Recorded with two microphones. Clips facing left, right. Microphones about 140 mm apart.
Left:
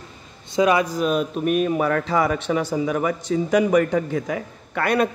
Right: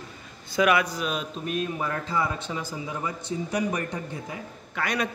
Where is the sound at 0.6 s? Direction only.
30° left (ahead or behind); by 4.4 s 90° left.